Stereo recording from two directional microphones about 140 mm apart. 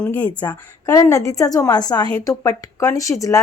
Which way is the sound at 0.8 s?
25° left (ahead or behind).